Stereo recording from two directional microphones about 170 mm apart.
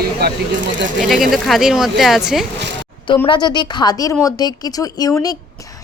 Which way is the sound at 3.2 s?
25° left (ahead or behind).